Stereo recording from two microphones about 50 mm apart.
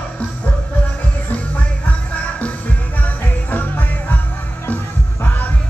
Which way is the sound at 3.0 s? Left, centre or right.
Left.